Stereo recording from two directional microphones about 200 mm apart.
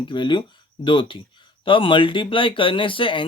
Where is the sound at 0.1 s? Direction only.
25° left (ahead or behind).